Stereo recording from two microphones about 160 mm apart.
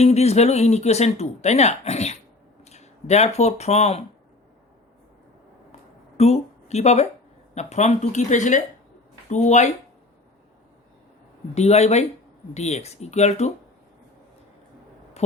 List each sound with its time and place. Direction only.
0.0 s speech: 40° left (ahead or behind)
6.1 s speech: 40° left (ahead or behind)
11.5 s speech: 45° left (ahead or behind)